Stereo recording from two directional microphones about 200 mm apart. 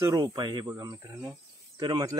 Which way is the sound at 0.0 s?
20° right (ahead or behind).